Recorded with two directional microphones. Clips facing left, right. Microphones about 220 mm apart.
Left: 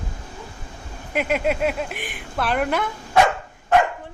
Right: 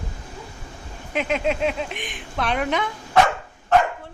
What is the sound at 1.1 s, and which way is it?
A woman's voice, 10° left (ahead or behind).